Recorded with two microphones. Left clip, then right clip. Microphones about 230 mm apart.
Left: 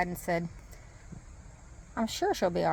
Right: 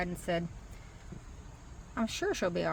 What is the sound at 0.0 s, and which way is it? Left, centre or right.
Speech, left.